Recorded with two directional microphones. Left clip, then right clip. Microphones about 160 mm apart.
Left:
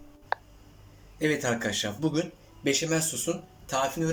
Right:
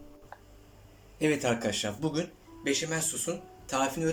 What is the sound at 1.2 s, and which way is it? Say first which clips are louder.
Speech: left 1 dB; 10° right (ahead or behind).